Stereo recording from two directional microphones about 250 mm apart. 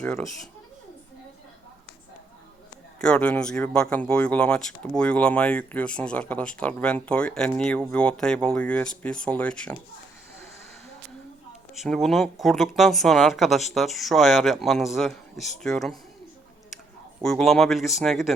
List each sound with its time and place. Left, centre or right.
0.0 s speech: centre
3.0 s speech: centre
11.7 s speech: centre
17.2 s speech: centre